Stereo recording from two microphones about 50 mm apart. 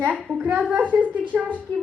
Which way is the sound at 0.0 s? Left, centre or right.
Right.